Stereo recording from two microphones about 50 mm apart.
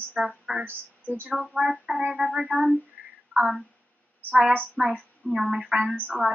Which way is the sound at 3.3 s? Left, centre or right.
Centre.